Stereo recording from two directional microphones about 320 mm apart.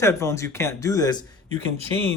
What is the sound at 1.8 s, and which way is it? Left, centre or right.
Speech, centre.